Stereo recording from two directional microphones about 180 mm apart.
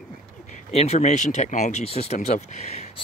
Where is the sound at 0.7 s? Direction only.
35° left (ahead or behind).